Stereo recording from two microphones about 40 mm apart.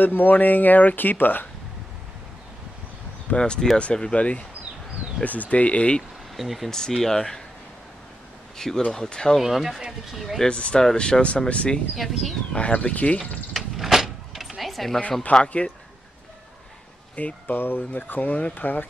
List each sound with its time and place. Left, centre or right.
0.0 s speech: left
3.3 s speech: left
6.3 s speech: centre
6.7 s speech: centre
8.5 s speech: centre
9.4 s speech: centre
10.5 s speech: left
11.9 s speech: centre
12.5 s speech: left
13.6 s vehicle: centre
14.7 s a sound: centre
15.3 s speech: left
17.1 s speech: left
17.5 s speech: left